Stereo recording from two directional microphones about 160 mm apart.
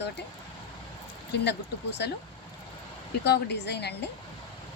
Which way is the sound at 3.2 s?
90° left.